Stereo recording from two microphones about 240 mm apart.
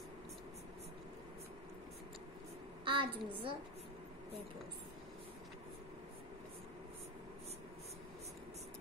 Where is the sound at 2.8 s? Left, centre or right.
Right.